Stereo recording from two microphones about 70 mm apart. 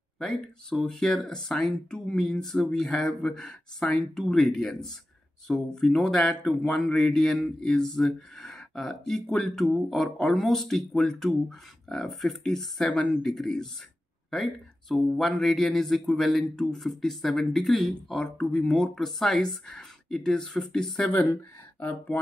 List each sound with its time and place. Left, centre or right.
0.2 s speech: centre
21.4 s speech: left